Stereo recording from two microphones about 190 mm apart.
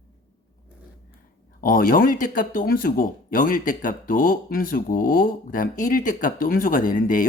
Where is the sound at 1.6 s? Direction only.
50° left (ahead or behind).